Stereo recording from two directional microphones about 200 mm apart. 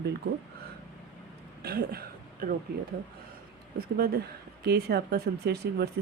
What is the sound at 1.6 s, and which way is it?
Speech, 50° right (ahead or behind).